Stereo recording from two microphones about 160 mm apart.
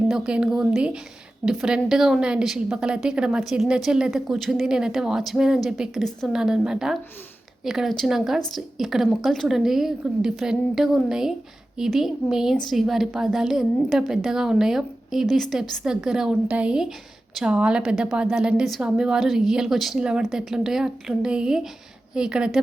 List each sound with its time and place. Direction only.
0.1 s a woman's voice: 5° right (ahead or behind)